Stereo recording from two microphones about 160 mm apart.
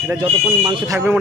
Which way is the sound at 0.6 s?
15° right (ahead or behind).